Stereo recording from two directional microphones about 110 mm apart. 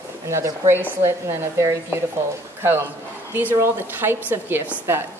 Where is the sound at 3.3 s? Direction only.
20° right (ahead or behind).